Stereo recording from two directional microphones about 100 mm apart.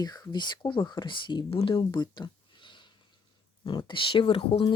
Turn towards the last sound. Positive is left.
turn(degrees=65)  # may be behind; listen again after turning